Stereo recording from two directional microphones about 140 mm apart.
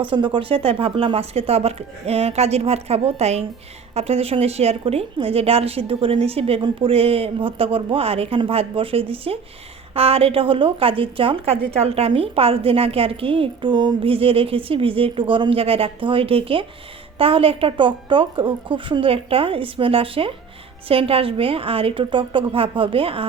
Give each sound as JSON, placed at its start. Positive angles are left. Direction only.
{"t": 0.0, "sound": "a woman's voice", "side_deg": -35}